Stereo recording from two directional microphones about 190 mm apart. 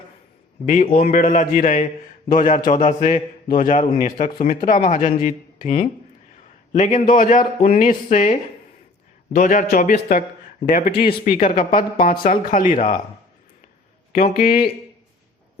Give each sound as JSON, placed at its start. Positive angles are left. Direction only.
{"t": 0.6, "sound": "speech", "side_deg": 40}
{"t": 6.7, "sound": "speech", "side_deg": 40}
{"t": 14.1, "sound": "speech", "side_deg": 50}